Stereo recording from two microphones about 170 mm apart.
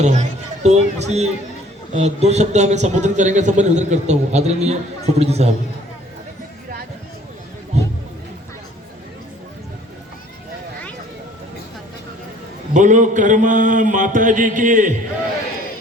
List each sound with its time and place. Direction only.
0.0 s a man's voice: 40° right (ahead or behind)
12.7 s a man's voice: 45° right (ahead or behind)